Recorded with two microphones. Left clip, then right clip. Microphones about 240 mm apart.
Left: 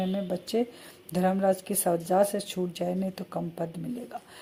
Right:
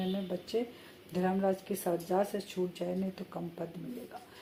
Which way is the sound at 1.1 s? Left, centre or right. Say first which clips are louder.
Left 6 dB; left.